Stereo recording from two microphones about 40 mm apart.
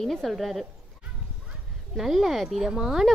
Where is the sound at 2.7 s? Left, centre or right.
Centre.